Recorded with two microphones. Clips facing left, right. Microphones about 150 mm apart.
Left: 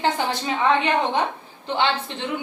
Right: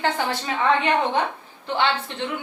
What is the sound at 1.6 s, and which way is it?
Speech, 25° left (ahead or behind).